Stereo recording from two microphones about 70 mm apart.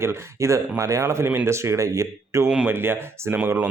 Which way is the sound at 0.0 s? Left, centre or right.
Right.